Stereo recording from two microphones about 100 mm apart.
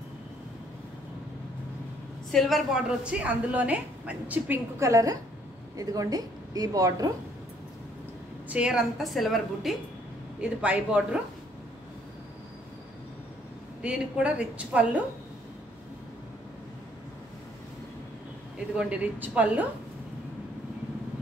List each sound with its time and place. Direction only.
2.3 s a woman's voice: centre (ahead or behind)
4.7 s a woman's voice: 35° right (ahead or behind)
8.5 s a woman's voice: 10° right (ahead or behind)
10.4 s a woman's voice: 10° right (ahead or behind)
13.8 s a woman's voice: 10° right (ahead or behind)
18.8 s a woman's voice: 15° right (ahead or behind)